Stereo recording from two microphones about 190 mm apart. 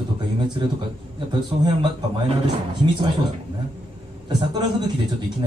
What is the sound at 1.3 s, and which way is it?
Speech, 25° right (ahead or behind).